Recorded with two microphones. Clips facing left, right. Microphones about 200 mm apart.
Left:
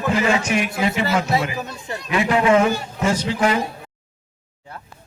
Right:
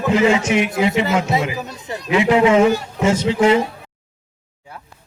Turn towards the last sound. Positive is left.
turn(degrees=-25)  # may be behind; listen again after turning